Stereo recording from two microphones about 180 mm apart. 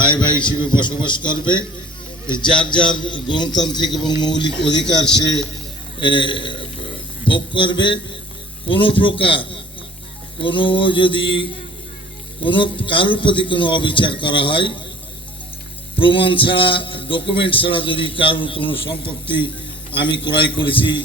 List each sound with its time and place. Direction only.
0.0 s a man's voice: 25° left (ahead or behind)
6.0 s a man's voice: 25° left (ahead or behind)
16.0 s a man's voice: 30° left (ahead or behind)